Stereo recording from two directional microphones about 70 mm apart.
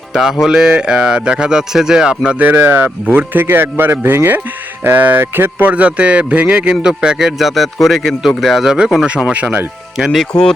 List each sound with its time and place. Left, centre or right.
0.1 s music: centre
0.4 s a man's voice: centre
2.4 s a man's voice: right; by 8.9 s centre
9.3 s speech: right
10.0 s speech: centre